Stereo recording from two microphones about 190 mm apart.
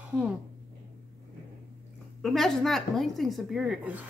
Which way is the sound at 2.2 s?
5° left (ahead or behind).